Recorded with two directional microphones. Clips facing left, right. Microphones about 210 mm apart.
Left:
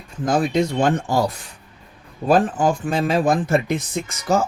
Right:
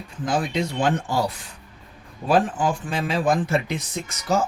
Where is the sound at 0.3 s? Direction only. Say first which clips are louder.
Left 5 dB; 45° left (ahead or behind).